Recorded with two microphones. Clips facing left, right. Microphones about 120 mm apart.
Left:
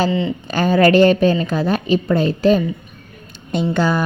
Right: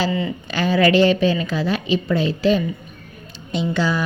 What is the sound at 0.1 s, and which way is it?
Speech, 25° left (ahead or behind).